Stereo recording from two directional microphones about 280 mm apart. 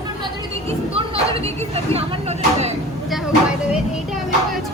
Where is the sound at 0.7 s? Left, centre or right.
Right.